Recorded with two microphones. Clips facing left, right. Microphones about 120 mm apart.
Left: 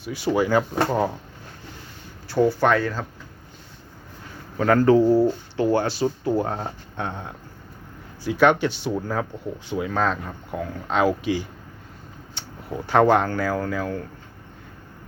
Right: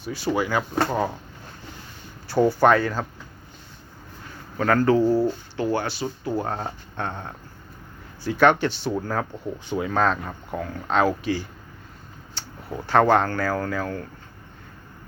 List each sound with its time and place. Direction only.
0.0 s speech: 15° left (ahead or behind)
0.3 s speech: 25° left (ahead or behind)
0.9 s speech: 10° left (ahead or behind)
2.2 s speech: centre (ahead or behind)
4.5 s speech: 20° left (ahead or behind)
6.5 s speech: 5° left (ahead or behind)
12.4 s a sound: 20° left (ahead or behind)
12.7 s speech: 15° left (ahead or behind)